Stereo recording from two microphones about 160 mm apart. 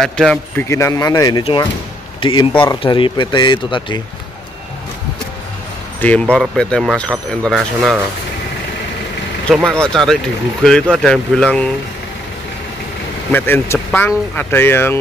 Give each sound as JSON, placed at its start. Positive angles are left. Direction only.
{"t": 0.0, "sound": "speech", "side_deg": 5}
{"t": 0.7, "sound": "speech", "side_deg": 20}
{"t": 2.1, "sound": "a sound", "side_deg": 30}
{"t": 2.6, "sound": "speech", "side_deg": 30}
{"t": 5.9, "sound": "speech", "side_deg": 10}
{"t": 9.5, "sound": "speech", "side_deg": 5}
{"t": 13.3, "sound": "speech", "side_deg": 15}